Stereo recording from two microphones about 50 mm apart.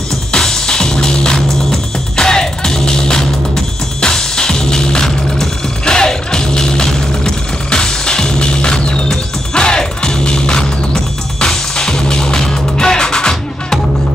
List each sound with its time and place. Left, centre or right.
0.3 s music: centre